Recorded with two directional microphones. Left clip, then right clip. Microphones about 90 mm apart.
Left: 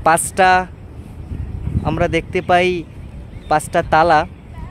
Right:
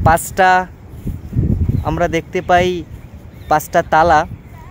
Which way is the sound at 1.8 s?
5° left (ahead or behind).